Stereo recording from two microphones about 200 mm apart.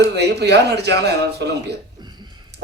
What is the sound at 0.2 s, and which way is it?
Speech, 55° right (ahead or behind).